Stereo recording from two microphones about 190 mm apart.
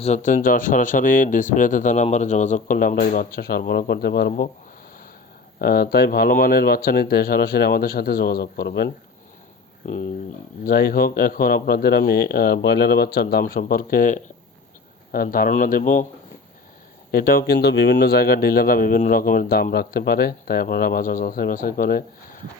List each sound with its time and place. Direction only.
0.0 s speech: 40° left (ahead or behind)
5.5 s speech: 55° left (ahead or behind)
9.8 s speech: 45° left (ahead or behind)
17.1 s speech: 50° left (ahead or behind)